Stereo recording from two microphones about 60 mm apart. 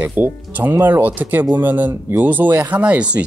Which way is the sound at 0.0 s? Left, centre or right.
Right.